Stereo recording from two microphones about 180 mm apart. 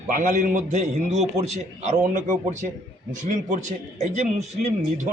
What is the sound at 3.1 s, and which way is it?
A man's voice, 45° right (ahead or behind).